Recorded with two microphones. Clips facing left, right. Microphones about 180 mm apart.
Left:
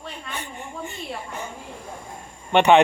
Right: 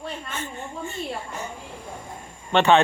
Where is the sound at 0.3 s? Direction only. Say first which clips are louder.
Right 1 dB; 15° left (ahead or behind).